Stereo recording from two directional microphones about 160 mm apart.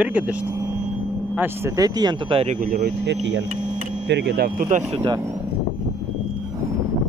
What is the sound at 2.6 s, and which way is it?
Speech, 70° right (ahead or behind).